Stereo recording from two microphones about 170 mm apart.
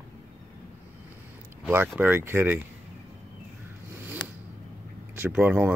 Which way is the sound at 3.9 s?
10° right (ahead or behind).